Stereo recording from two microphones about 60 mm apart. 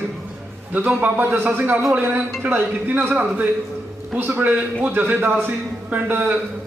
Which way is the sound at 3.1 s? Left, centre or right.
Centre.